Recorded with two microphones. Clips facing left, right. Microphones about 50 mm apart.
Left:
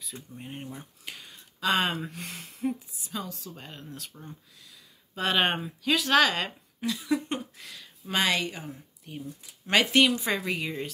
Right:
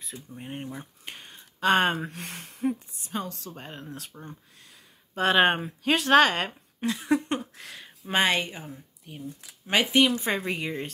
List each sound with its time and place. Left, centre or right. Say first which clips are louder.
0.0 s speech: right 1 dB; right
1.0 s a sound: right 1 dB; right
2.0 s speech: right 1 dB; right
3.7 s speech: right 3 dB; right
4.1 s a sound: right 2 dB; right
5.6 s speech: right 2 dB; right
8.6 s speech: left 1 dB; centre
9.7 s speech: even; centre
10.1 s speech: right 1 dB; right